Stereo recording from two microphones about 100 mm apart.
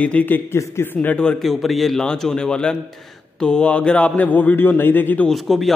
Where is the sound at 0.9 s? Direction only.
10° left (ahead or behind).